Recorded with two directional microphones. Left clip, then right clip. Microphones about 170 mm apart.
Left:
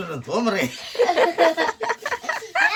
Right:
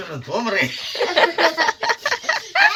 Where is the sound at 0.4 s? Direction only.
60° left (ahead or behind).